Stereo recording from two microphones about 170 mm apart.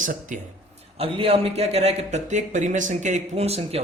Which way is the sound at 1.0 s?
35° right (ahead or behind).